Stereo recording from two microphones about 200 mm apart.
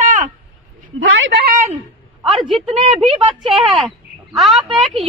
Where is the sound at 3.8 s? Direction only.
Centre (ahead or behind).